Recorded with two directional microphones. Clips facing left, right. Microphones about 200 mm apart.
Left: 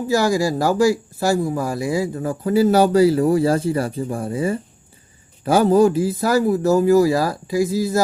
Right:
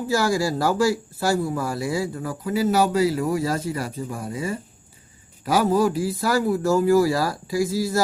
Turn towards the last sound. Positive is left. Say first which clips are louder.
# left 3 dB
turn(degrees=20)  # may be behind; listen again after turning